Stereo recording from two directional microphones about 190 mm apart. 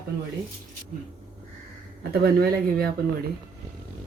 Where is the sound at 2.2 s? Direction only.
55° right (ahead or behind).